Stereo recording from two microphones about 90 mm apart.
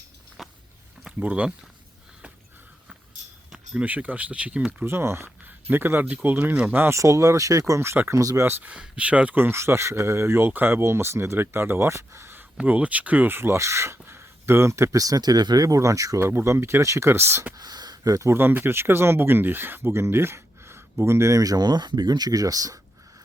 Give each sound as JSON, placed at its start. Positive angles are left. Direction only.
{"t": 0.4, "sound": "a sound", "side_deg": -5}
{"t": 1.2, "sound": "speech", "side_deg": -15}
{"t": 3.5, "sound": "speech", "side_deg": -15}
{"t": 4.9, "sound": "speech", "side_deg": -30}
{"t": 8.4, "sound": "speech", "side_deg": -25}
{"t": 8.7, "sound": "speech", "side_deg": -15}
{"t": 12.5, "sound": "speech", "side_deg": -15}
{"t": 16.2, "sound": "speech", "side_deg": -25}
{"t": 17.6, "sound": "speech", "side_deg": -50}
{"t": 18.3, "sound": "speech", "side_deg": -25}